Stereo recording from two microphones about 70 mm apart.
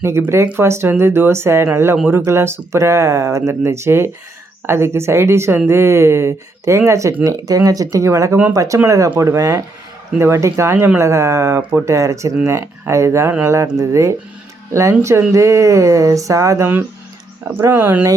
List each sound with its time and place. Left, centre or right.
0.2 s speech: right
7.3 s speech: right
17.5 s speech: right